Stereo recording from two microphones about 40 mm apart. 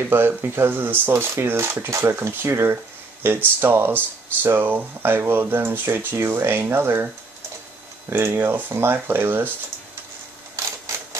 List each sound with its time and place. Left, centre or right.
0.1 s speech: right
8.1 s speech: right